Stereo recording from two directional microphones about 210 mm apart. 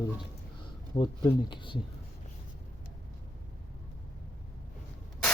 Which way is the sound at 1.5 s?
25° left (ahead or behind).